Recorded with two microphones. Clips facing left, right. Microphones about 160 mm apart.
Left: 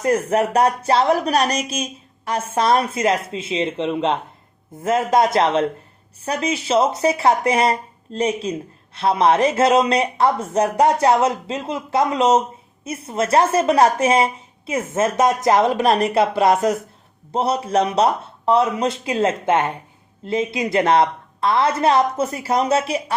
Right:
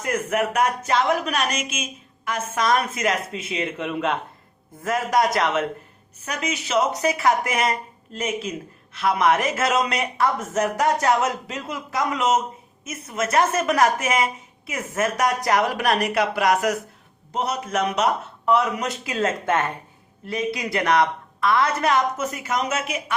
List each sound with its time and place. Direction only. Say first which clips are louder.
0.0 s speech: left 5 dB; 35° left (ahead or behind)